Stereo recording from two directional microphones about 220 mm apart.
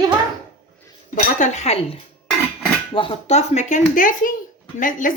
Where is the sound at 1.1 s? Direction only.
35° left (ahead or behind).